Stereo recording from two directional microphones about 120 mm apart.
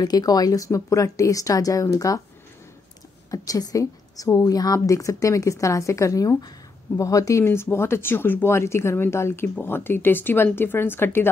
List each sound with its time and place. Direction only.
0.0 s speech: 30° left (ahead or behind)
3.3 s speech: 30° left (ahead or behind)